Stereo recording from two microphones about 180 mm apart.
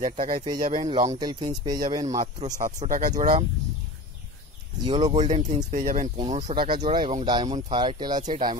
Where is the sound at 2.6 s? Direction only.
50° right (ahead or behind).